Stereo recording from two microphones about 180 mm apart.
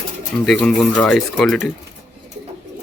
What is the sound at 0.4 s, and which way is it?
Speech, 5° left (ahead or behind).